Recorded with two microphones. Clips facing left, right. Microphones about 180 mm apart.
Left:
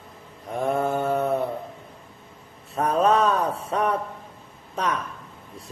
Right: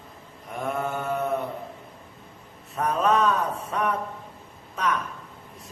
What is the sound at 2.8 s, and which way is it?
A man's voice, 30° left (ahead or behind).